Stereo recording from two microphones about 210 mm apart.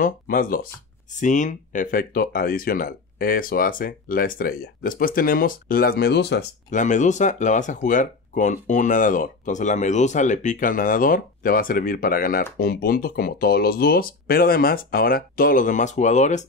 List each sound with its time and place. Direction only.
0.0 s speech: 40° left (ahead or behind)
6.7 s speech: 35° left (ahead or behind)